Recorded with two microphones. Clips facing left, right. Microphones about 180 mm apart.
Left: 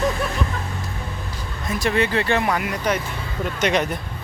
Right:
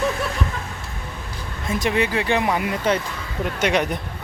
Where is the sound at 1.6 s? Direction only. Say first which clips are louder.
Even; 20° right (ahead or behind).